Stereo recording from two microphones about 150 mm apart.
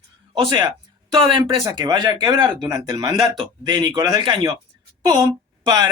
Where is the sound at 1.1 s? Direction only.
35° right (ahead or behind).